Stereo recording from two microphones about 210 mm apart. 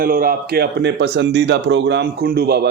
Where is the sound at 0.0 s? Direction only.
45° right (ahead or behind).